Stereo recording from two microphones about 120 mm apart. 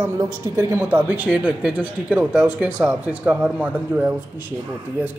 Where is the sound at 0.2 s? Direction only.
25° right (ahead or behind).